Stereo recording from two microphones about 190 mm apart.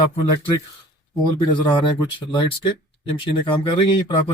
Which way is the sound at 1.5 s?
25° left (ahead or behind).